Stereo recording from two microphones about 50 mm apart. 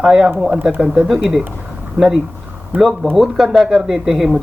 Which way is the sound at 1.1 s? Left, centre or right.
Centre.